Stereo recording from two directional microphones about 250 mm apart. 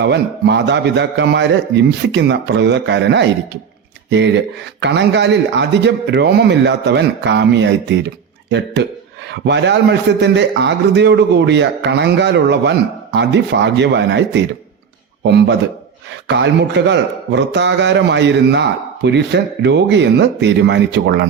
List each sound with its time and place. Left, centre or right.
0.0 s a man's voice: right
4.8 s a man's voice: right